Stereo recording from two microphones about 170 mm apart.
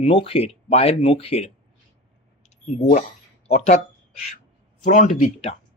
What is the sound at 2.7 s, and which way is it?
Speech, 45° left (ahead or behind).